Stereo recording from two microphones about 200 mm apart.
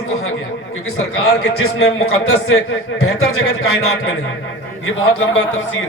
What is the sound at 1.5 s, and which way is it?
A man's voice, 90° left.